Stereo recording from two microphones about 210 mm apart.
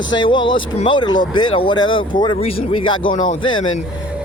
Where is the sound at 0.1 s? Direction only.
20° left (ahead or behind).